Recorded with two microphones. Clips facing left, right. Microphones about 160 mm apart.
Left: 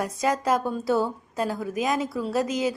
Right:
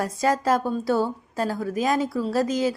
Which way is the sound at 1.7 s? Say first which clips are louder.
Right 3 dB; 30° right (ahead or behind).